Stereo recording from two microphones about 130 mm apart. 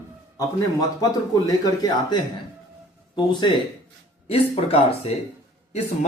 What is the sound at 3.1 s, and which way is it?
Speech, 35° left (ahead or behind).